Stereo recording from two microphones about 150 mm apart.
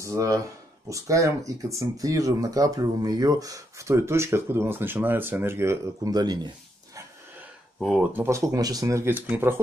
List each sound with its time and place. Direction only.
0.0 s speech: 20° right (ahead or behind)
7.8 s speech: 5° right (ahead or behind)